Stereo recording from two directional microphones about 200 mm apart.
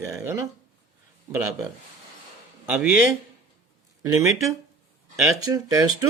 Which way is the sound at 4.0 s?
15° right (ahead or behind).